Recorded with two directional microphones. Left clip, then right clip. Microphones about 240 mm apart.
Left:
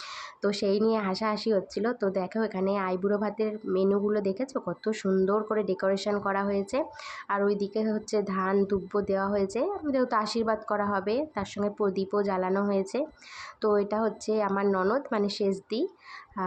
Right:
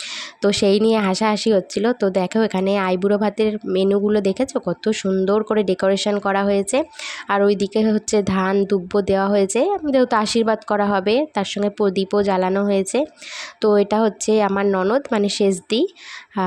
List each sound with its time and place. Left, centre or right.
0.1 s speech: right